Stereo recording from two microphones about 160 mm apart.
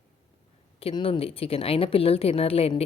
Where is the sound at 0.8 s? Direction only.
35° left (ahead or behind).